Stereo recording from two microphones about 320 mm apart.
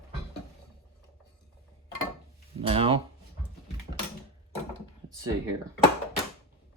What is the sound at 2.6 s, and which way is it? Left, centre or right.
Speech, centre.